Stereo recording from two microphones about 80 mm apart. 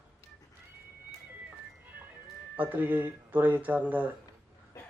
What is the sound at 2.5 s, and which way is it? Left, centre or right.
Speech, right.